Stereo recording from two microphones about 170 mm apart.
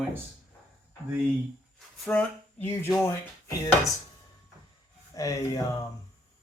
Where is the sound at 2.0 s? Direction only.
10° left (ahead or behind).